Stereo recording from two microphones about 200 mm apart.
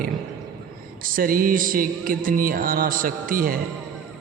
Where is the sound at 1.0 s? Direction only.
45° right (ahead or behind).